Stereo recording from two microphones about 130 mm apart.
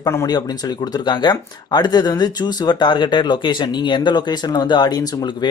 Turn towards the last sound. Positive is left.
turn(degrees=30)  # may be behind; listen again after turning